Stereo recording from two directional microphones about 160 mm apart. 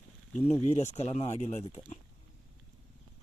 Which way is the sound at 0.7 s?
45° left (ahead or behind).